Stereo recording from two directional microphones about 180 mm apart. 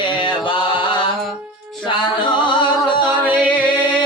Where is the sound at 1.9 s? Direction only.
25° left (ahead or behind).